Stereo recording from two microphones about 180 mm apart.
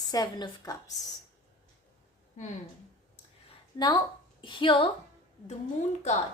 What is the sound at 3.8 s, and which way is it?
A woman's voice, 20° left (ahead or behind).